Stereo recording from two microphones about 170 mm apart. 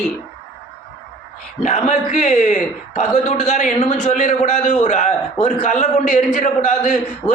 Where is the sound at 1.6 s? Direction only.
45° left (ahead or behind).